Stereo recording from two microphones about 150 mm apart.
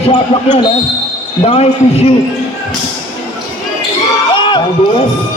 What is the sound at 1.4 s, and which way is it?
Speech, 45° left (ahead or behind).